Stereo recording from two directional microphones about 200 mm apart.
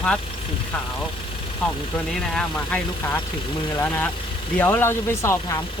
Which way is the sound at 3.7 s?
10° left (ahead or behind).